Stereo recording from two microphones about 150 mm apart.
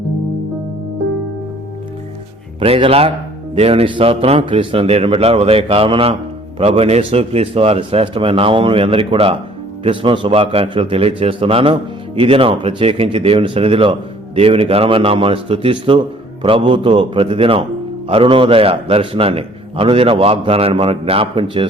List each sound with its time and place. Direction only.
2.6 s a man's voice: 40° right (ahead or behind)